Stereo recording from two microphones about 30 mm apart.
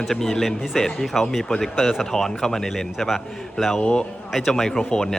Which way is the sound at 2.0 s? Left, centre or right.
Centre.